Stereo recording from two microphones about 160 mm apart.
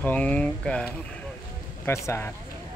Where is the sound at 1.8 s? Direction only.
15° left (ahead or behind).